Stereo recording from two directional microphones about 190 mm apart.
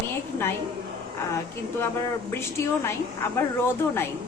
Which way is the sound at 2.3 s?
10° left (ahead or behind).